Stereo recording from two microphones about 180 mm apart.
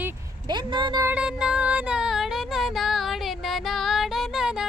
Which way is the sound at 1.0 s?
5° right (ahead or behind).